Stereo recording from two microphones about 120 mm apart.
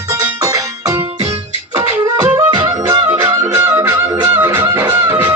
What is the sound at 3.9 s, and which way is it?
Music, 30° right (ahead or behind).